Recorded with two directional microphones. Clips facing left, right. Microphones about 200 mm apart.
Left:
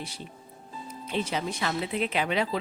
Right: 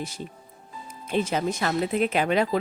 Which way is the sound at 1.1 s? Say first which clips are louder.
Right 5 dB; 45° right (ahead or behind).